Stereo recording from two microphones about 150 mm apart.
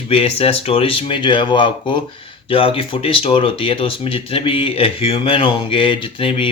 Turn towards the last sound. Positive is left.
turn(degrees=35)  # may be behind; listen again after turning